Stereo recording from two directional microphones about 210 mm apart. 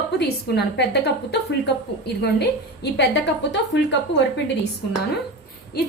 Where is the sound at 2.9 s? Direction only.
55° left (ahead or behind).